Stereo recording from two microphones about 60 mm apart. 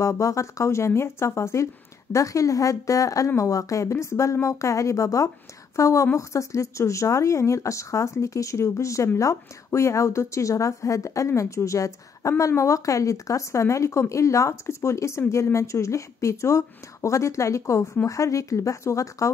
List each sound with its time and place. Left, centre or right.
0.0 s speech: left